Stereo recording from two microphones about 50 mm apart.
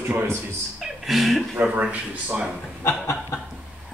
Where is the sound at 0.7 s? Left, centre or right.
Centre.